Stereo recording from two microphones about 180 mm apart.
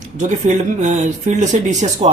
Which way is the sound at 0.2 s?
40° right (ahead or behind).